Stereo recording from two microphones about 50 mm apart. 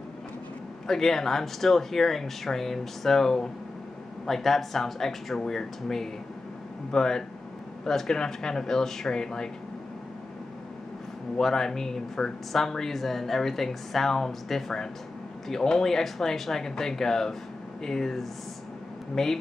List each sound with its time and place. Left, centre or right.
0.8 s speech: centre
11.3 s speech: centre